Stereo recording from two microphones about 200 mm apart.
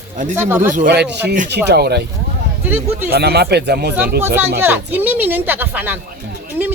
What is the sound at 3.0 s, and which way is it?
Speech, 55° right (ahead or behind).